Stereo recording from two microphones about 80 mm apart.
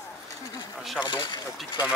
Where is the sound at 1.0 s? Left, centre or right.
Left.